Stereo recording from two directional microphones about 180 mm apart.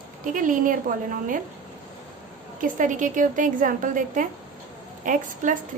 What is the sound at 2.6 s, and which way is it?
A woman's voice, 45° right (ahead or behind).